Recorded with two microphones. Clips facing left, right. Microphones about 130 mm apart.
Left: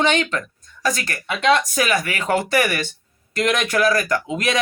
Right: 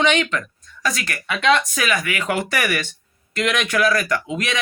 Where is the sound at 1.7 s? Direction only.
40° left (ahead or behind).